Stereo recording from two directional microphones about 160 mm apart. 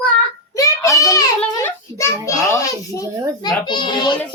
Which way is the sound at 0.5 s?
20° left (ahead or behind).